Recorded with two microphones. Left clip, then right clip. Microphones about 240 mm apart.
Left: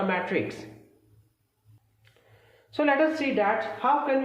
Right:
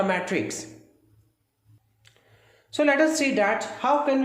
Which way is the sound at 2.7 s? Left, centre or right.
Centre.